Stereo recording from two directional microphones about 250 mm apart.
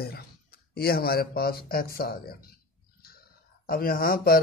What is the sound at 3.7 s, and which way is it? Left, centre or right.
Speech, left.